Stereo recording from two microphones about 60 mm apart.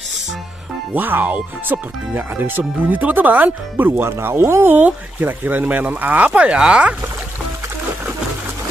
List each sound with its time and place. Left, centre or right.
0.9 s speech: right
3.9 s speech: right
4.6 s speech: right; by 7.0 s centre